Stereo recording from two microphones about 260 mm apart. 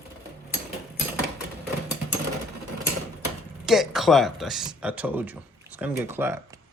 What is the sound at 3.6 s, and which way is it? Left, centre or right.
Speech, centre.